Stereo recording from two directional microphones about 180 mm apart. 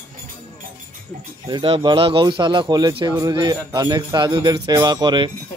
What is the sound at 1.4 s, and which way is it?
Speech, 25° right (ahead or behind).